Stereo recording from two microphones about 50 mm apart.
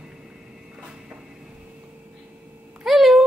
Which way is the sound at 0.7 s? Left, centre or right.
Centre.